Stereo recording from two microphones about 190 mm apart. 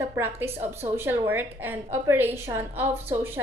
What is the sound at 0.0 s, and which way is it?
A woman's voice, 10° right (ahead or behind).